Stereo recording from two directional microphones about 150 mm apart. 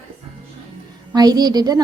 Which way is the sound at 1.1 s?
25° right (ahead or behind).